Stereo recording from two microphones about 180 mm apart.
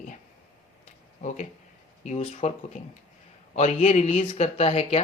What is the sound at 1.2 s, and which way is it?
Speech, 40° left (ahead or behind).